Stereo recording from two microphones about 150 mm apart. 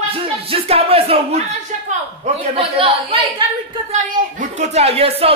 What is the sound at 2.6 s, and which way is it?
Speech, 40° right (ahead or behind).